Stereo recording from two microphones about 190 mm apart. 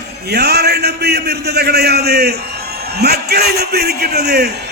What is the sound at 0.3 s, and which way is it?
A man's voice, 60° right (ahead or behind).